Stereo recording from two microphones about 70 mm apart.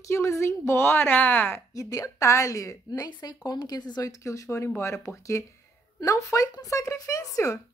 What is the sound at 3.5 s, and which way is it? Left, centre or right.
Speech, left.